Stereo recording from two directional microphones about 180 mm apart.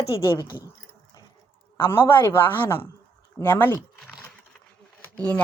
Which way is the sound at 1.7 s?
15° left (ahead or behind).